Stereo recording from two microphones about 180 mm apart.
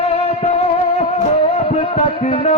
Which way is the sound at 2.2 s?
35° left (ahead or behind).